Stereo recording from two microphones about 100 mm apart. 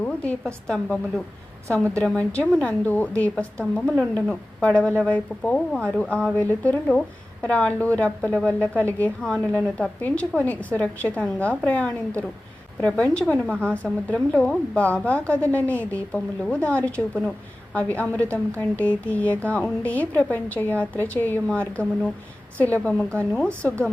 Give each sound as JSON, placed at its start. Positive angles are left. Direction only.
{"t": 0.0, "sound": "a woman's voice", "side_deg": 15}